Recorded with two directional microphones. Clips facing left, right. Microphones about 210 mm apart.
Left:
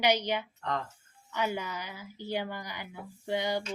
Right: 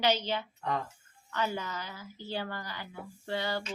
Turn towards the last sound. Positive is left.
turn(degrees=15)  # may be behind; listen again after turning